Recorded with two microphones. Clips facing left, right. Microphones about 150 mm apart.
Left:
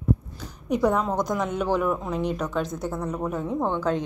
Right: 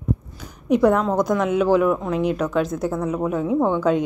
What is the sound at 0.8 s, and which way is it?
Speech, 90° right.